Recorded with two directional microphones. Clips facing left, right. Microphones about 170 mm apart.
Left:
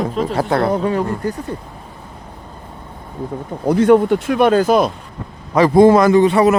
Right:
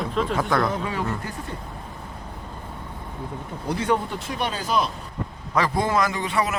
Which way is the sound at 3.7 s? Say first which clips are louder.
Left 13 dB; 60° left (ahead or behind).